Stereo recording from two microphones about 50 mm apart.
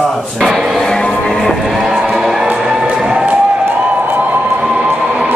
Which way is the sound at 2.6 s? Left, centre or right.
Centre.